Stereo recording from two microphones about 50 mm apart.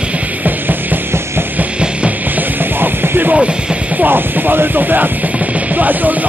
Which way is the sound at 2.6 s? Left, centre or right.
Right.